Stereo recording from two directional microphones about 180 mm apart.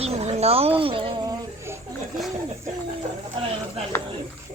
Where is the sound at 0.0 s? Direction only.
35° right (ahead or behind).